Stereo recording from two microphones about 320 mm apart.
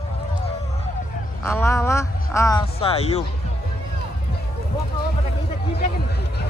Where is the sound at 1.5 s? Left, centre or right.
Centre.